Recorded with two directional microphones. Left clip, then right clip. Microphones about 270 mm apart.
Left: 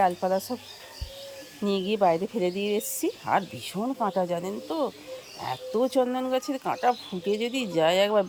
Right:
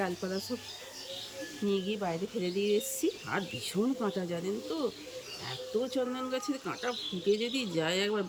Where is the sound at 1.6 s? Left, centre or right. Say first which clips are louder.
Left 10 dB; centre.